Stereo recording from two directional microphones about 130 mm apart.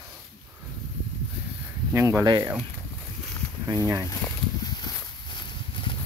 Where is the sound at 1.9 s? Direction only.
20° right (ahead or behind).